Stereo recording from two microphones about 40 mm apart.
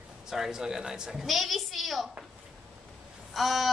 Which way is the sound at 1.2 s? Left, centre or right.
Centre.